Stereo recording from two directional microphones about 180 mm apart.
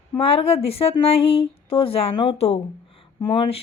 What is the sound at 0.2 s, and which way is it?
A woman's voice, 30° left (ahead or behind).